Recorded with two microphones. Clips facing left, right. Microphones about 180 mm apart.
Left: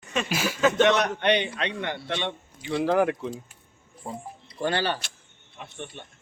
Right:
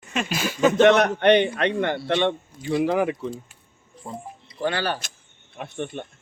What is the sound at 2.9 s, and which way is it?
Speech, 5° right (ahead or behind).